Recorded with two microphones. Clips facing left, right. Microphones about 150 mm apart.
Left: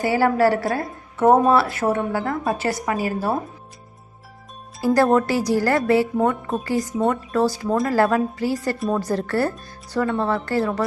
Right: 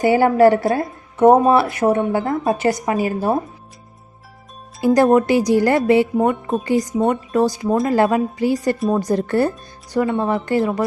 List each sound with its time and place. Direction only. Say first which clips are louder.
0.0 s a woman's voice: right 5 dB; 20° right (ahead or behind)
4.8 s speech: right 4 dB; 20° right (ahead or behind)